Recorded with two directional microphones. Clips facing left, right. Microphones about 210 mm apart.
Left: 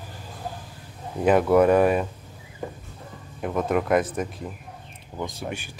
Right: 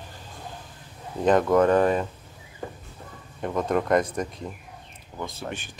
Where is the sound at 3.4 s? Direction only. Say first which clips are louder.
Left 1 dB; 5° left (ahead or behind).